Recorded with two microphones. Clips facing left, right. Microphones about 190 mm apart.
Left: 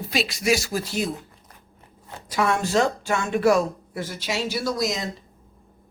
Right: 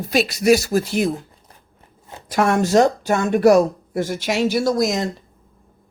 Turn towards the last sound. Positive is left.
turn(degrees=-50)  # may be behind; listen again after turning